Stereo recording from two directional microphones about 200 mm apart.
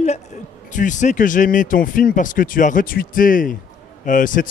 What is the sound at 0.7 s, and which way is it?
Speech, 40° left (ahead or behind).